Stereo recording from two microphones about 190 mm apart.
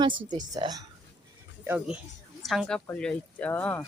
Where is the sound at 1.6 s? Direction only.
10° right (ahead or behind).